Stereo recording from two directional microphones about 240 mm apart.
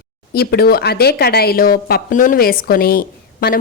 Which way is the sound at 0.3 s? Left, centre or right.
Left.